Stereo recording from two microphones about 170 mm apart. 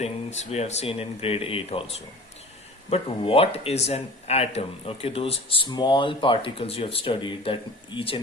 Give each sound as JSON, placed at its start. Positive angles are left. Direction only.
{"t": 0.0, "sound": "speech", "side_deg": 40}
{"t": 2.9, "sound": "speech", "side_deg": 35}